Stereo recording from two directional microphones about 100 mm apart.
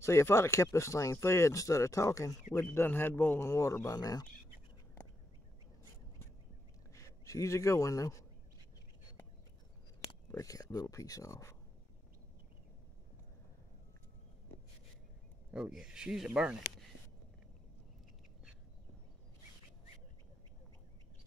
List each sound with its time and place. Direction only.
0.0 s speech: 30° left (ahead or behind)
2.7 s speech: 20° left (ahead or behind); by 4.3 s 40° left (ahead or behind)
6.9 s speech: 35° left (ahead or behind)
10.3 s speech: 35° left (ahead or behind)
15.5 s speech: 5° right (ahead or behind)